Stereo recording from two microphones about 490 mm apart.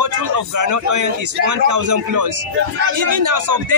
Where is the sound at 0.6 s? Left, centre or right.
Right.